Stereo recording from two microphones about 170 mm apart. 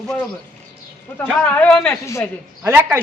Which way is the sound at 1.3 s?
10° left (ahead or behind).